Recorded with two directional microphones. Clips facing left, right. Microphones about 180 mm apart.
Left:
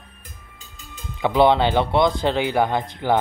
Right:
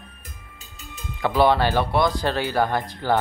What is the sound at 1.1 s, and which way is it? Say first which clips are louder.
Speech: left 2 dB; 20° left (ahead or behind).